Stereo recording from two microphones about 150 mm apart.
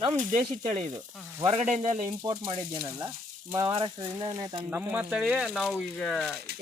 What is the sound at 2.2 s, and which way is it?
Speech, 35° right (ahead or behind).